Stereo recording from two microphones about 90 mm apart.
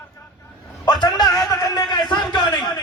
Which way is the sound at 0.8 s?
50° left (ahead or behind).